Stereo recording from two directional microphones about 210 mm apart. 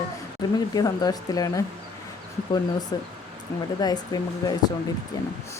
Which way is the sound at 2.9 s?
20° left (ahead or behind).